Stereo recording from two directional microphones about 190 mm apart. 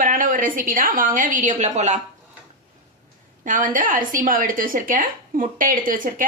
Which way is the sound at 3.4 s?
45° right (ahead or behind).